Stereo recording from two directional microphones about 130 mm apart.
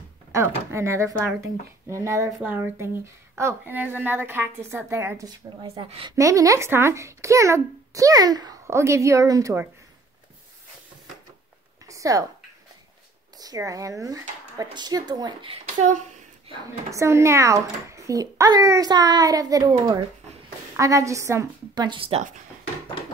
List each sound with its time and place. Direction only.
0.3 s a child's voice: 20° right (ahead or behind)
2.4 s speech: 15° right (ahead or behind)
5.9 s speech: 45° right (ahead or behind)
6.1 s a child's voice: 25° right (ahead or behind)
11.8 s a sound: 25° right (ahead or behind)
13.4 s a child's voice: 25° right (ahead or behind)
15.5 s speech: 60° right (ahead or behind)
16.9 s a child's voice: 20° right (ahead or behind)
21.8 s speech: 45° right (ahead or behind)